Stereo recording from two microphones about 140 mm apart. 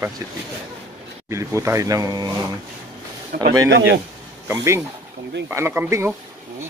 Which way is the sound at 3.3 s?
90° right.